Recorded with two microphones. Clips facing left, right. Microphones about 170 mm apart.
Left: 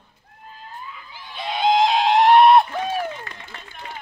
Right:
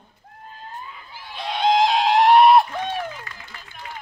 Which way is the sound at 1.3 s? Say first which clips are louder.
Even; centre (ahead or behind).